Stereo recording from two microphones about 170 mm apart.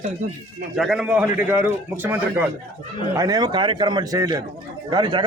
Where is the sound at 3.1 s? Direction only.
20° right (ahead or behind).